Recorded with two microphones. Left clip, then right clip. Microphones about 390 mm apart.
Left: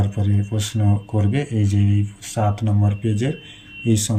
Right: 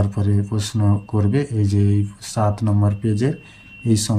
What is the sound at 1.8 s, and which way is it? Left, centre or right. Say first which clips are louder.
Speech: right 3 dB; centre.